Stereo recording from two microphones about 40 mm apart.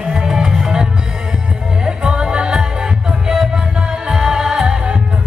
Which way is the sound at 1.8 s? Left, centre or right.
Right.